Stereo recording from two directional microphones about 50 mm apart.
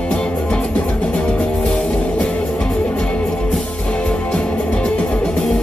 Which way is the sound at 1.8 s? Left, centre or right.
Left.